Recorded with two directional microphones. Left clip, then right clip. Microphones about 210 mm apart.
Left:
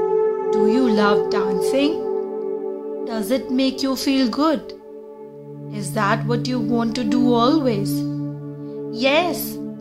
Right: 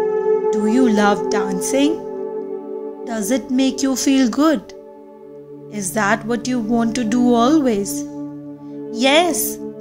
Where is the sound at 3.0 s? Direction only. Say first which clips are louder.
Right 1 dB; 10° right (ahead or behind).